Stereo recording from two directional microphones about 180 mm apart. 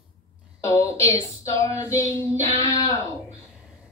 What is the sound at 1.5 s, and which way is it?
Female singing, 15° left (ahead or behind).